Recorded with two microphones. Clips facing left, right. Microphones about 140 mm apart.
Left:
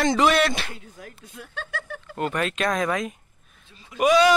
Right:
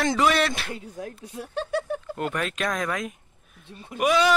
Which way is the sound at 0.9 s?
35° right (ahead or behind).